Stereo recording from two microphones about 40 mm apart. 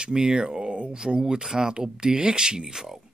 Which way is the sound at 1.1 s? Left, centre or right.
Centre.